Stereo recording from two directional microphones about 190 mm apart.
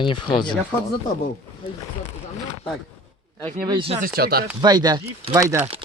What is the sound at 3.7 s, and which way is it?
Speech, 30° right (ahead or behind).